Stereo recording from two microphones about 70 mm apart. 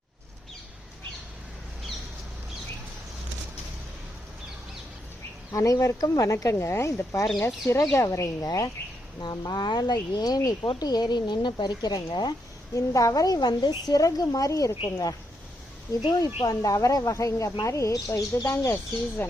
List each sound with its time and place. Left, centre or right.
5.5 s speech: left
8.4 s a woman's voice: left
9.2 s speech: left
10.8 s speech: left
12.7 s a woman's voice: left
14.0 s a woman's voice: left
16.0 s speech: left